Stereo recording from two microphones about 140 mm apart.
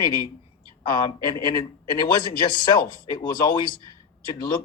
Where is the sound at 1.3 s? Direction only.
35° left (ahead or behind).